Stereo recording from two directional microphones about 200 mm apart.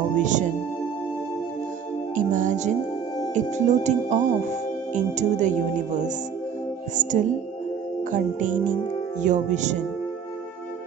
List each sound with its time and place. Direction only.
0.2 s speech: 35° right (ahead or behind)
2.1 s music: 40° right (ahead or behind)
3.3 s speech: 35° right (ahead or behind)
7.0 s speech: 40° right (ahead or behind)